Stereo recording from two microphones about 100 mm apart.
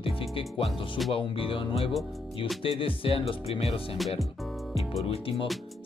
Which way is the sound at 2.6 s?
65° left (ahead or behind).